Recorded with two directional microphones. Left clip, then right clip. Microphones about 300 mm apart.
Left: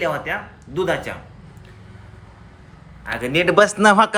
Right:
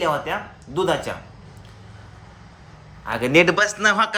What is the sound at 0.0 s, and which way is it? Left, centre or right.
Speech, centre.